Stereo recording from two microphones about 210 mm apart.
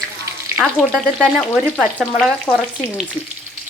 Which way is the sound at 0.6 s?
Centre (ahead or behind).